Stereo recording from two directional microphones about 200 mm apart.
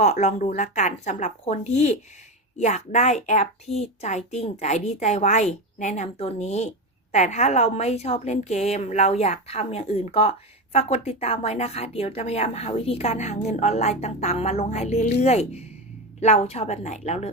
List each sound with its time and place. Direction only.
0.0 s a woman's voice: 35° left (ahead or behind)